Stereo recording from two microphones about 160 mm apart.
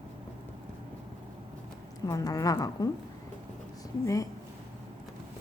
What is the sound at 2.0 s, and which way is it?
Speech, 20° left (ahead or behind).